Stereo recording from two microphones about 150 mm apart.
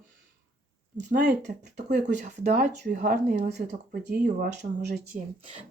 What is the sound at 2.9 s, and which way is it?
Speech, 60° right (ahead or behind).